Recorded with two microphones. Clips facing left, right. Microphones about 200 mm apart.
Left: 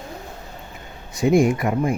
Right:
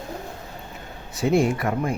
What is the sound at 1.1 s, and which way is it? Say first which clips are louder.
Speech: left 3 dB; 15° left (ahead or behind).